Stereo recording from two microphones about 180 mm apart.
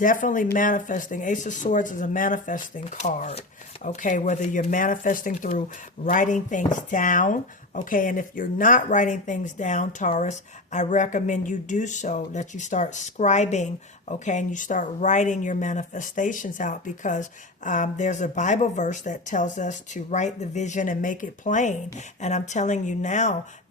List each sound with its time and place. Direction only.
0.0 s a woman's voice: 50° left (ahead or behind)